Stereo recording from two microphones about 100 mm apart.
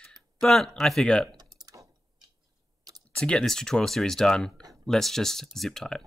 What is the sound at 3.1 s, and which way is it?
Speech, 10° left (ahead or behind).